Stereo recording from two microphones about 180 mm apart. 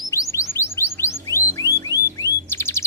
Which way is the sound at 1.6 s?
15° right (ahead or behind).